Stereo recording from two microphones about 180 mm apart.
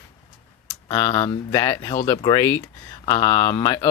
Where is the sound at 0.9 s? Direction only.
20° left (ahead or behind).